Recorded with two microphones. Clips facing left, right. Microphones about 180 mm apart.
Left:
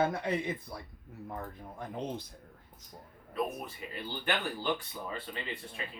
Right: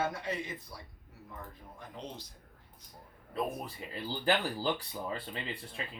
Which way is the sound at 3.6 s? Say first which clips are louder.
Right 1 dB; 35° right (ahead or behind).